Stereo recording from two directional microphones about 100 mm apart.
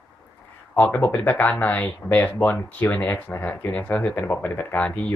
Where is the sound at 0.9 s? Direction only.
20° left (ahead or behind).